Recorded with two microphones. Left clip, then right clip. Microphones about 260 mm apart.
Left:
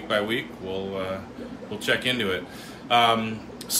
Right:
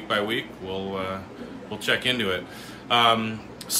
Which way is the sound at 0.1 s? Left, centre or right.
Centre.